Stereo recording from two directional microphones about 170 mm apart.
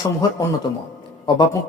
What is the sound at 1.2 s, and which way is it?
Speech, 25° left (ahead or behind).